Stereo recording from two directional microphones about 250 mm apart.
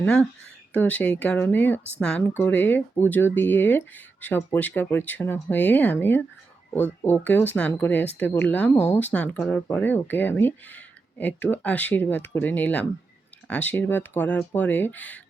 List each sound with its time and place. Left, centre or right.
0.0 s speech: centre